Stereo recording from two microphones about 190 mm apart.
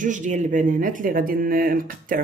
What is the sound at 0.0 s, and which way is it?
Speech, 40° right (ahead or behind).